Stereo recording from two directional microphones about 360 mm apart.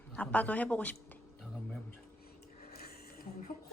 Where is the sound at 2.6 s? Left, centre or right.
Left.